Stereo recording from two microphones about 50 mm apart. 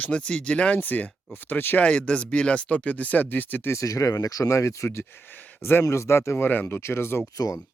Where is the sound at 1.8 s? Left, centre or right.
Left.